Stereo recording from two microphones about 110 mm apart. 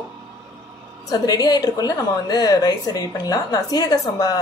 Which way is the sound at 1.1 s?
35° left (ahead or behind).